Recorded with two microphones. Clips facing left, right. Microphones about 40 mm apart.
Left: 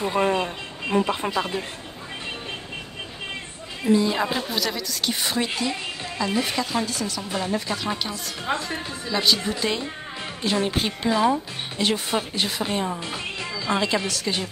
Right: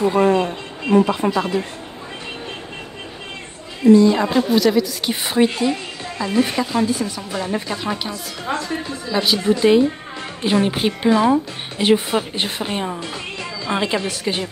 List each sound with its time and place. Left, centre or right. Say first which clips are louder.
0.1 s music: right 6 dB; centre
1.2 s a woman's voice: right 7 dB; centre
3.8 s a woman's voice: right 9 dB; centre
7.2 s a woman's voice: right 2 dB; centre
7.6 s a woman's voice: right 3 dB; centre
7.9 s a woman's voice: right 3 dB; centre
8.5 s a woman's voice: right 3 dB; centre
9.1 s a woman's voice: right 5 dB; centre
12.4 s a woman's voice: right 2 dB; right
12.6 s a woman's voice: right 2 dB; centre
13.0 s speech: right 2 dB; centre
13.7 s a woman's voice: right 2 dB; right